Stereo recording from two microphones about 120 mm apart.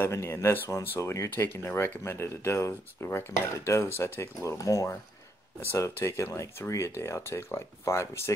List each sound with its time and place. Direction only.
0.0 s speech: 20° left (ahead or behind)